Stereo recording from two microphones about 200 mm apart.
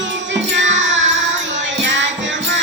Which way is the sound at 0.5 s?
65° right (ahead or behind).